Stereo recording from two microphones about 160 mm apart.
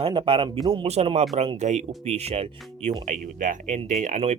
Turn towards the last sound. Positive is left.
turn(degrees=-45)  # may be behind; listen again after turning